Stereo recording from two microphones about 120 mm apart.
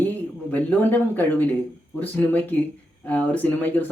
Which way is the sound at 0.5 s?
15° left (ahead or behind).